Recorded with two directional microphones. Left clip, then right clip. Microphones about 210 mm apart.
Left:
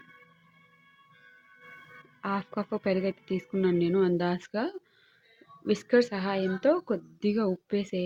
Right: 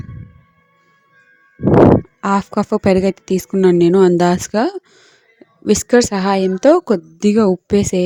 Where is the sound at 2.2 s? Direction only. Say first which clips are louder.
Right 15 dB; 45° right (ahead or behind).